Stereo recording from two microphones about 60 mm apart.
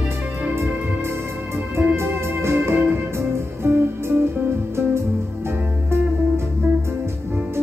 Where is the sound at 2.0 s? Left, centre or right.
Right.